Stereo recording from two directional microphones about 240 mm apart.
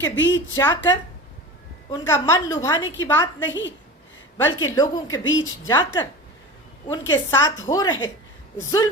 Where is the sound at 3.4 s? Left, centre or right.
Left.